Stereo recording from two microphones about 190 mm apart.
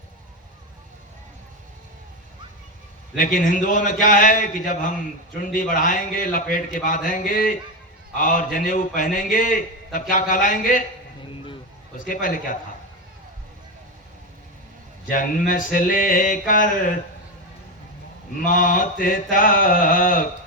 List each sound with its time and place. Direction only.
3.2 s a man's voice: 45° left (ahead or behind)
11.9 s a man's voice: 45° left (ahead or behind)
15.1 s a man's voice: 45° left (ahead or behind)
18.4 s a man's voice: 45° left (ahead or behind)